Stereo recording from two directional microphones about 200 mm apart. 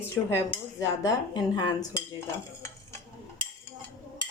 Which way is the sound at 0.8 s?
15° left (ahead or behind).